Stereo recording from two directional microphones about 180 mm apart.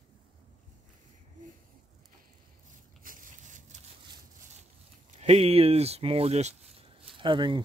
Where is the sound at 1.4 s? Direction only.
45° right (ahead or behind).